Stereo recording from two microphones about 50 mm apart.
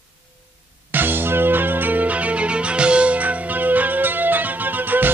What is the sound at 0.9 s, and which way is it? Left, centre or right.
Music, right.